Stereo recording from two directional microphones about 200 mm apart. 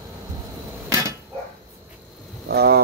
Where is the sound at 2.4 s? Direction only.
50° right (ahead or behind).